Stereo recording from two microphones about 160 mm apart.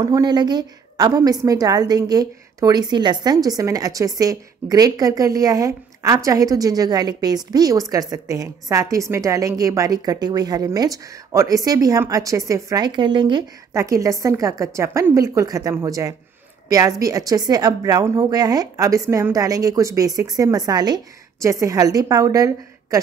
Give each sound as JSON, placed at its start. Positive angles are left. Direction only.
{"t": 0.0, "sound": "a woman's voice", "side_deg": -25}